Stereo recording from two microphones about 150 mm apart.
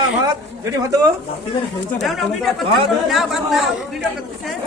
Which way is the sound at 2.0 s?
Centre (ahead or behind).